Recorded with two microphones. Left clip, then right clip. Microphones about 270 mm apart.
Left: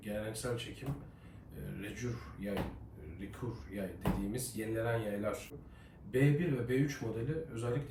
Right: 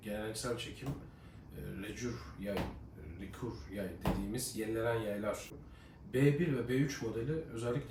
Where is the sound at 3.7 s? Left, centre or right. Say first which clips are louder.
Even; centre.